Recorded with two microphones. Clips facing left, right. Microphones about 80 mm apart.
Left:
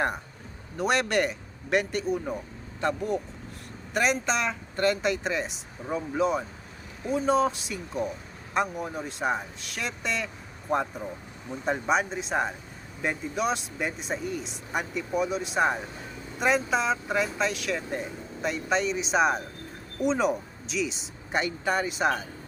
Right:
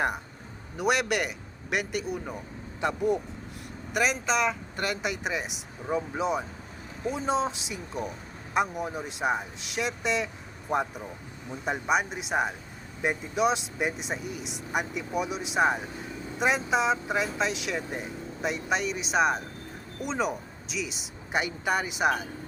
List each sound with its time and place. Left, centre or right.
0.8 s speech: centre
2.8 s speech: centre
3.9 s speech: centre
11.6 s speech: centre